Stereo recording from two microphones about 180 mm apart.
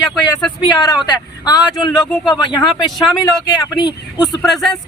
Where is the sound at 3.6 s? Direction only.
20° left (ahead or behind).